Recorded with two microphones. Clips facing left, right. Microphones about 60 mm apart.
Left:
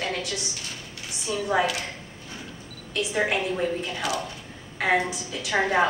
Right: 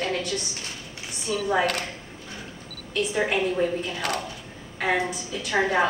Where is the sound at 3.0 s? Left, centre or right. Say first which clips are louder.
Right 1 dB; centre.